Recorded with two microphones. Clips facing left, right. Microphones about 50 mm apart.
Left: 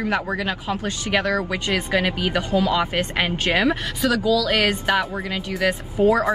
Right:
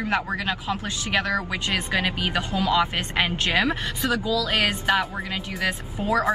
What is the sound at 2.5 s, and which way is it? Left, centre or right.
Speech, centre.